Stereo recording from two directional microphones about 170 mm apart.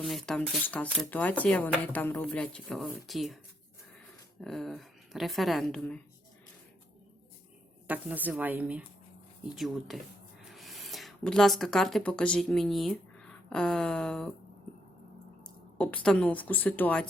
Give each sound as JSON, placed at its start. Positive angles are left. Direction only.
{"t": 0.0, "sound": "speech", "side_deg": 0}
{"t": 4.4, "sound": "a woman's voice", "side_deg": 0}
{"t": 7.9, "sound": "a woman's voice", "side_deg": -10}
{"t": 15.8, "sound": "speech", "side_deg": 5}